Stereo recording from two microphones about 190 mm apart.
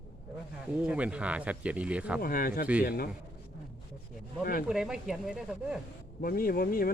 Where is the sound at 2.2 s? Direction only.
50° left (ahead or behind).